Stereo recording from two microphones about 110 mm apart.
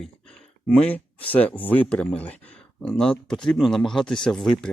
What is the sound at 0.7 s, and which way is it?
Speech, 10° left (ahead or behind).